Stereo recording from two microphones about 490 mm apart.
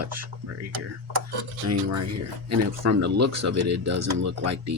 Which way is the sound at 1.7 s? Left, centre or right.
Right.